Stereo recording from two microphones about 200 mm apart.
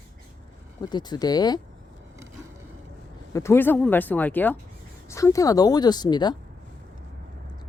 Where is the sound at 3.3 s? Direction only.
10° left (ahead or behind).